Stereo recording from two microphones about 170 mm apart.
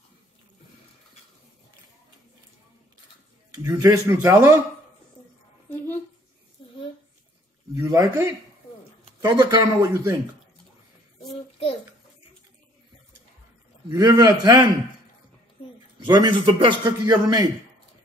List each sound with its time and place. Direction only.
3.6 s speech: 20° right (ahead or behind)
7.7 s a sound: 20° right (ahead or behind)
9.2 s a man's voice: 25° right (ahead or behind)
13.8 s a man's voice: 20° right (ahead or behind)
16.1 s a man's voice: 30° right (ahead or behind)